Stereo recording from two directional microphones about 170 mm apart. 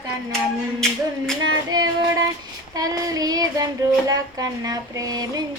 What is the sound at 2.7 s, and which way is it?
Mantra, 20° right (ahead or behind).